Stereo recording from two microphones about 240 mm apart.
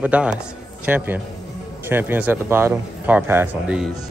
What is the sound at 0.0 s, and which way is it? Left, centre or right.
A man's voice, centre.